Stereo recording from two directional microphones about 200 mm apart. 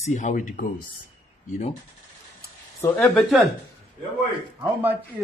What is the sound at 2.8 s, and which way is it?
Speech, 10° left (ahead or behind).